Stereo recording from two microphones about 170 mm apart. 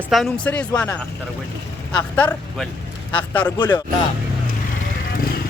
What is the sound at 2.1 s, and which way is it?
Speech, 10° left (ahead or behind).